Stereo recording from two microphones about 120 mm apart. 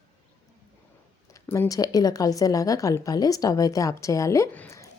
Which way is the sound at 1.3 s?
20° left (ahead or behind).